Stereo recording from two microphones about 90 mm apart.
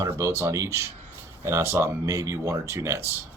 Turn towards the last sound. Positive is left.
turn(degrees=-30)  # may be behind; listen again after turning